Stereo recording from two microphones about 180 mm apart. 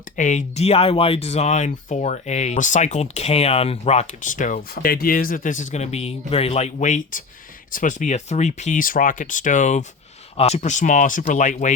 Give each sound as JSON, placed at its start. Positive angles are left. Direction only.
{"t": 0.2, "sound": "speech", "side_deg": 40}